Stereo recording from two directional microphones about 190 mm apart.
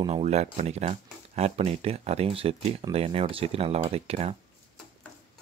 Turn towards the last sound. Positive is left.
turn(degrees=-35)  # may be behind; listen again after turning